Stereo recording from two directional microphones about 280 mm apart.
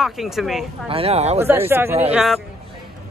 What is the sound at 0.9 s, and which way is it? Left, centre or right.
Speech, right.